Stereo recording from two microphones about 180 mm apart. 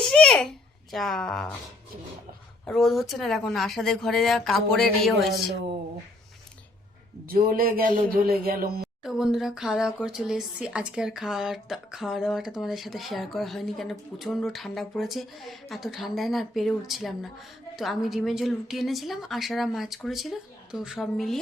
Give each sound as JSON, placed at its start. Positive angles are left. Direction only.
{"t": 0.0, "sound": "babbling", "side_deg": 0}
{"t": 2.6, "sound": "speech", "side_deg": 0}
{"t": 7.3, "sound": "speech", "side_deg": -55}
{"t": 9.0, "sound": "speech", "side_deg": 0}